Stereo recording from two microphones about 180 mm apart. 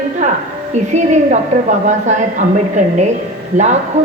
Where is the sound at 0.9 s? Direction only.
40° right (ahead or behind).